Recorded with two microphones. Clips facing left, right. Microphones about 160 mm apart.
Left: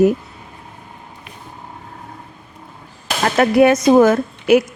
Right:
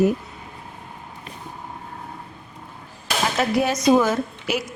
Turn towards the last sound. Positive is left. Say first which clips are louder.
# left 10 dB
turn(degrees=55)  # may be behind; listen again after turning